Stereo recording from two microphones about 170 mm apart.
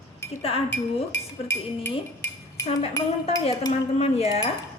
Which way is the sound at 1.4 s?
15° left (ahead or behind).